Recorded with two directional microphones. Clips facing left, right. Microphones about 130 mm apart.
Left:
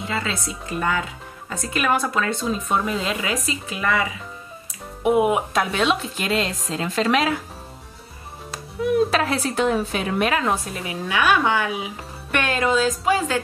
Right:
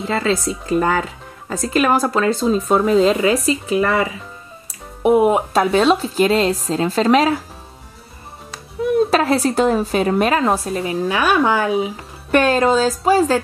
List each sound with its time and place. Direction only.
0.0 s a woman's voice: 35° right (ahead or behind)
8.8 s a sound: 35° right (ahead or behind)
9.1 s a woman's voice: 35° right (ahead or behind)